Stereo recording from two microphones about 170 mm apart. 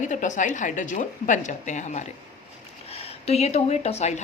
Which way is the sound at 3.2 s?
40° left (ahead or behind).